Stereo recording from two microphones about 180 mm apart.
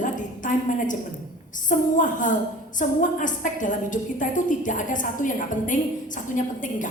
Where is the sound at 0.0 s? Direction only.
45° left (ahead or behind).